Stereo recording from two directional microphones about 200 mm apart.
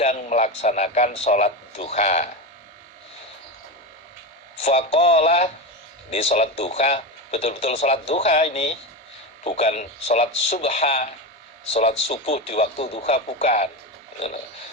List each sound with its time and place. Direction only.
0.0 s speech: 35° left (ahead or behind)
4.5 s speech: 35° left (ahead or behind)